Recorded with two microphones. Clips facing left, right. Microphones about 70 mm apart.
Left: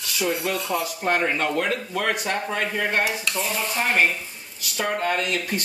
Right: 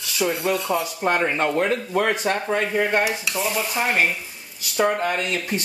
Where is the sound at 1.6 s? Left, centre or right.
Right.